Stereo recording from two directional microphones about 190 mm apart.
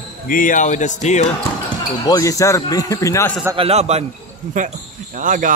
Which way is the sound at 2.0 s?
20° left (ahead or behind).